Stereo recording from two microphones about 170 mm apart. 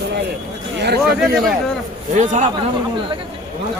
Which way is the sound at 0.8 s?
70° right (ahead or behind).